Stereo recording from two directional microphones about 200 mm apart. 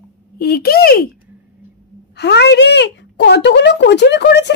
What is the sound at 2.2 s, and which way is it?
Speech, 60° left (ahead or behind).